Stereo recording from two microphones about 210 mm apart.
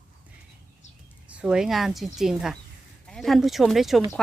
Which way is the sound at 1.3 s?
5° right (ahead or behind).